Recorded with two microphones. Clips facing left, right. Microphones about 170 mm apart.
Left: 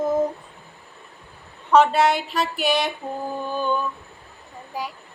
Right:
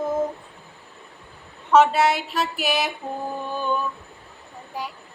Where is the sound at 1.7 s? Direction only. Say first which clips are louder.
Even; centre (ahead or behind).